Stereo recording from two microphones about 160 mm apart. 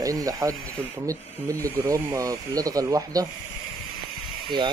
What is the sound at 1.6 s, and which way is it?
Speech, 20° right (ahead or behind).